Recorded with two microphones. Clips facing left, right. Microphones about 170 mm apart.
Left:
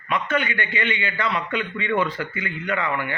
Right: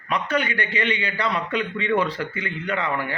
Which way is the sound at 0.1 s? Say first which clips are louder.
Even; 40° right (ahead or behind).